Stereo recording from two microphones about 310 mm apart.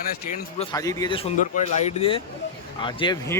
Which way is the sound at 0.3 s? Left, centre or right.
Centre.